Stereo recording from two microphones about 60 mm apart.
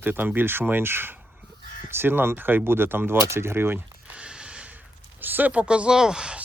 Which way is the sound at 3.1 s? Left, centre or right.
Right.